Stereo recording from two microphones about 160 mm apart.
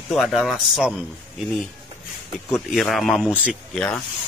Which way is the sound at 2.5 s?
Centre (ahead or behind).